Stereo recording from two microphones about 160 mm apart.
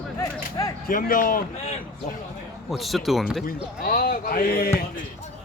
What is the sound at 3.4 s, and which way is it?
A man's voice, 60° left (ahead or behind).